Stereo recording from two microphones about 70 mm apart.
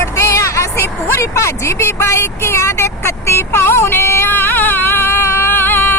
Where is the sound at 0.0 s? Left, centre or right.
Left.